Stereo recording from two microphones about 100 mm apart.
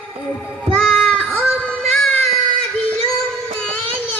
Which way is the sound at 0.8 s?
5° left (ahead or behind).